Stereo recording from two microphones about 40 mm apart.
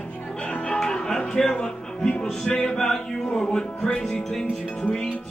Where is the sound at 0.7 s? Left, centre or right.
Centre.